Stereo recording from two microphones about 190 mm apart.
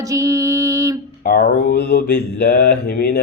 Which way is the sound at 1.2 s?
55° left (ahead or behind).